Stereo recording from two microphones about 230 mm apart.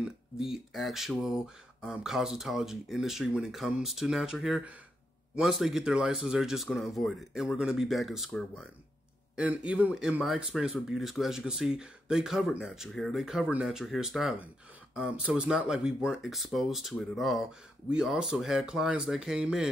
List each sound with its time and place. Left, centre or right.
0.0 s speech: centre